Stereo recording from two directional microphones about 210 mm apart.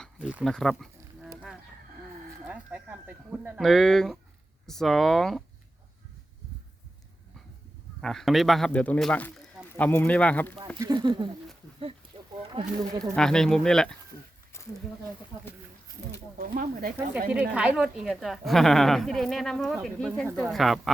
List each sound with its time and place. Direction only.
0.0 s a sound: centre (ahead or behind)
2.5 s a woman's voice: 5° right (ahead or behind)
8.0 s a woman's voice: centre (ahead or behind)
10.8 s speech: 20° right (ahead or behind)
12.0 s a sound: 25° right (ahead or behind)
13.1 s a woman's voice: 5° left (ahead or behind)
16.4 s speech: 45° right (ahead or behind)
17.3 s a woman's voice: 5° right (ahead or behind)